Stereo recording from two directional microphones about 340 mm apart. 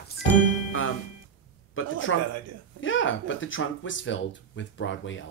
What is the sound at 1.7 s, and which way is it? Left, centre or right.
Speech, left.